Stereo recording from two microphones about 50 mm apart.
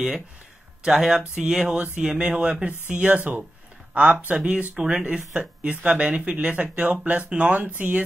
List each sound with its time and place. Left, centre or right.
0.8 s speech: centre; by 8.0 s right